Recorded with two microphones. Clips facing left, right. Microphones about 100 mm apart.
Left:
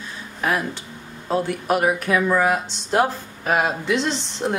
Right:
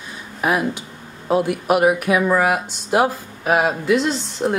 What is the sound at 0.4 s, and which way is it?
Speech, 15° right (ahead or behind).